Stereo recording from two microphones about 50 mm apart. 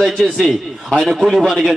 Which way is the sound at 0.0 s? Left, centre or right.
Centre.